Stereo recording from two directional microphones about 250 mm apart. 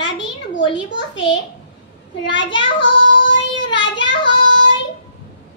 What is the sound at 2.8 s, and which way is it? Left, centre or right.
Child singing, left.